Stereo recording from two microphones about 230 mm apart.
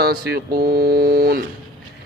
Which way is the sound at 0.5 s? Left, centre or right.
Right.